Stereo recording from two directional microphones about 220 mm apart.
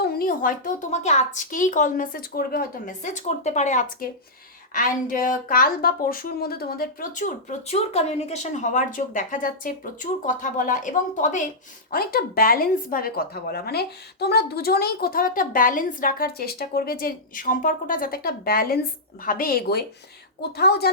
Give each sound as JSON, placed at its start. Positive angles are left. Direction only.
{"t": 0.0, "sound": "a woman's voice", "side_deg": 45}